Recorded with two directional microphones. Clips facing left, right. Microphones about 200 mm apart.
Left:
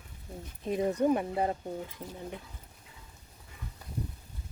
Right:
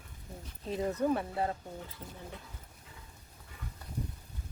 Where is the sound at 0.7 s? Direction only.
15° left (ahead or behind).